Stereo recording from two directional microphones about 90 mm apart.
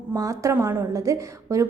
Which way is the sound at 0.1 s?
35° right (ahead or behind).